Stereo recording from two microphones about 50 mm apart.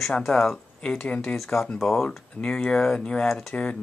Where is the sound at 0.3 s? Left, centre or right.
Centre.